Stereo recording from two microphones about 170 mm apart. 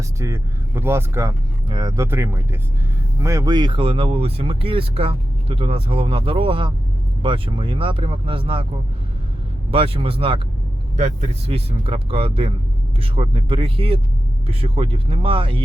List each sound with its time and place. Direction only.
0.2 s speech: 15° right (ahead or behind); by 8.6 s 30° right (ahead or behind)
9.7 s speech: 35° right (ahead or behind)